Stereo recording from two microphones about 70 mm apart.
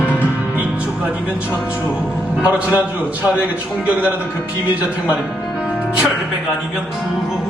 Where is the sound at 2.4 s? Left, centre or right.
Right.